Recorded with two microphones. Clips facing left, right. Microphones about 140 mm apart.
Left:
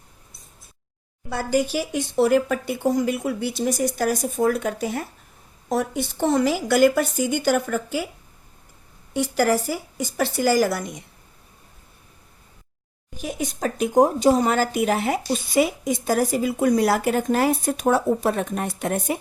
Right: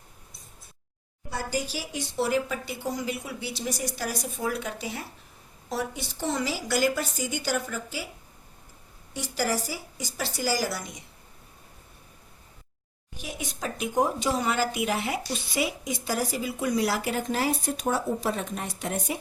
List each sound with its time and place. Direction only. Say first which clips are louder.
1.3 s speech: left 9 dB; 65° left (ahead or behind)
9.1 s speech: left 8 dB; 55° left (ahead or behind)
13.1 s speech: left 8 dB; 45° left (ahead or behind)